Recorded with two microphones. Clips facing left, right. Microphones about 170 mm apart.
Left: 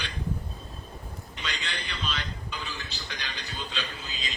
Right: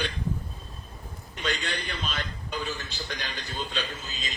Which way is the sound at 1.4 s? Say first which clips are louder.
Right 6 dB; 50° right (ahead or behind).